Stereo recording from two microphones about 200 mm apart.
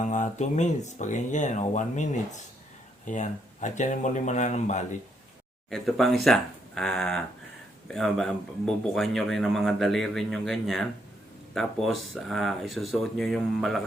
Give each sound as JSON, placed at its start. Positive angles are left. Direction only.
{"t": 0.0, "sound": "speech", "side_deg": 40}
{"t": 5.7, "sound": "speech", "side_deg": 0}